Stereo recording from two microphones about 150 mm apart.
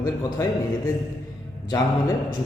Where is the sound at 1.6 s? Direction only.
25° left (ahead or behind).